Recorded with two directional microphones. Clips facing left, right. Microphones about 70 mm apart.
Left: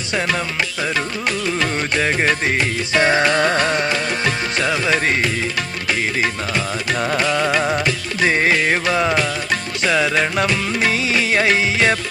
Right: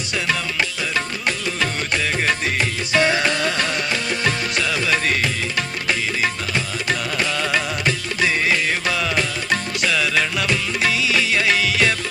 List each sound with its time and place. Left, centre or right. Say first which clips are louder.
0.1 s music: left 3 dB; left
2.0 s music: left 4 dB; left
7.0 s music: left 5 dB; left